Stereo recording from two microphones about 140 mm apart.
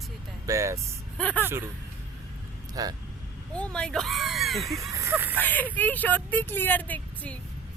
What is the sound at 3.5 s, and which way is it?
Speech, 5° left (ahead or behind).